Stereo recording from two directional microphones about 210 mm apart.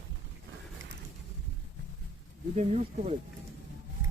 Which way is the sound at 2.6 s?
35° right (ahead or behind).